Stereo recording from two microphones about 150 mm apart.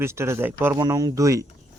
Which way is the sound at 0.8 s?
25° right (ahead or behind).